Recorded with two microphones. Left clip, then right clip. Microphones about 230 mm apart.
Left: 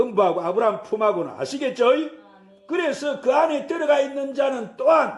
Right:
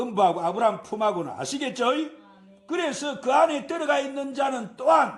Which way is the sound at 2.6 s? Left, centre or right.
Right.